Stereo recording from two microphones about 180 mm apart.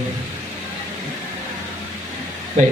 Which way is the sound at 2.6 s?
45° right (ahead or behind).